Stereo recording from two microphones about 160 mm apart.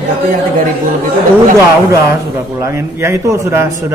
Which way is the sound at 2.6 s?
15° right (ahead or behind).